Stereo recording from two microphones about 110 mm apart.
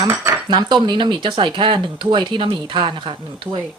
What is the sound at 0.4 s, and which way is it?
Speech, 40° right (ahead or behind).